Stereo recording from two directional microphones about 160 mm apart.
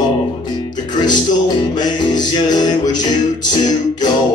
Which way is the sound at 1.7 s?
25° left (ahead or behind).